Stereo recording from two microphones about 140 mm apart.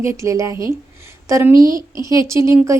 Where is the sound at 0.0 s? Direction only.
20° right (ahead or behind).